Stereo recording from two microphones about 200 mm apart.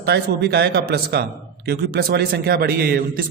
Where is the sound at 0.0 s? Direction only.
55° right (ahead or behind).